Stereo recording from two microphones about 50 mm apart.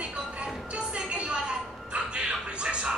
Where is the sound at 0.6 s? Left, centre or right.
Right.